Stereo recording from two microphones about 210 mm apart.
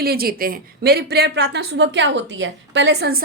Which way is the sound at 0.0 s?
45° right (ahead or behind).